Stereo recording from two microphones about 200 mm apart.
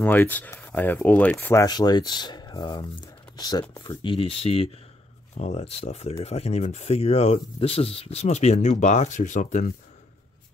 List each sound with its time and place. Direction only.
0.0 s speech: 10° left (ahead or behind); by 9.7 s 40° left (ahead or behind)